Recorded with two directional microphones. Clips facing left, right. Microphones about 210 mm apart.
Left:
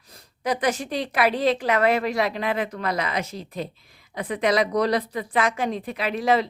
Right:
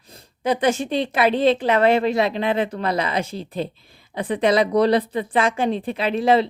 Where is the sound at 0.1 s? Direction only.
25° right (ahead or behind).